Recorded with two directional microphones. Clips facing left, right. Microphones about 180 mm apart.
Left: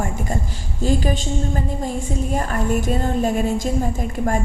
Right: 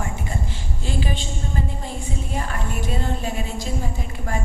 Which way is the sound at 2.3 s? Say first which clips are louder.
Left 8 dB; 45° left (ahead or behind).